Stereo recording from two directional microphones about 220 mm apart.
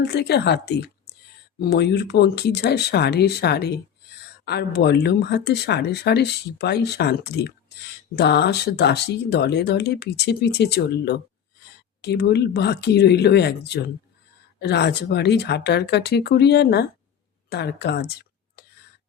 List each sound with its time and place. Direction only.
0.0 s a woman's voice: 50° left (ahead or behind)